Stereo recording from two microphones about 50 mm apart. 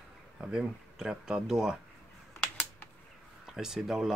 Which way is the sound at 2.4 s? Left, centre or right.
Left.